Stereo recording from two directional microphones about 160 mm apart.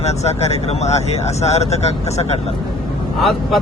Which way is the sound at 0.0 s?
40° left (ahead or behind).